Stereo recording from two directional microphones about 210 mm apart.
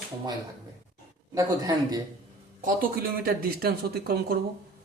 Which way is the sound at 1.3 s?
15° right (ahead or behind).